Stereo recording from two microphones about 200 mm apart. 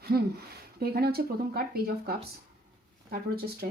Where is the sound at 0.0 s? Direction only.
50° right (ahead or behind).